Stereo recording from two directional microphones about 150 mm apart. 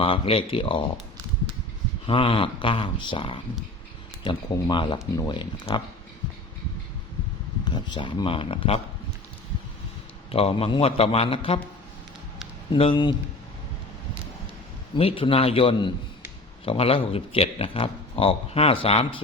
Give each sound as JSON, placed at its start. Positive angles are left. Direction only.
{"t": 0.0, "sound": "speech", "side_deg": 40}
{"t": 2.0, "sound": "speech", "side_deg": 35}
{"t": 7.6, "sound": "speech", "side_deg": 30}
{"t": 10.3, "sound": "speech", "side_deg": 40}
{"t": 12.7, "sound": "speech", "side_deg": 35}
{"t": 14.9, "sound": "speech", "side_deg": 40}